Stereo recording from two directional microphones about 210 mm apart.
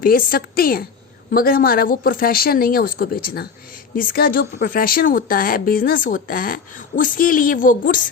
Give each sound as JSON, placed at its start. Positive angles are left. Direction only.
{"t": 0.0, "sound": "speech", "side_deg": 40}